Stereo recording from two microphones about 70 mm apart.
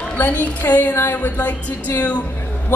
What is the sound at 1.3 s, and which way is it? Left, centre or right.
Speech, left.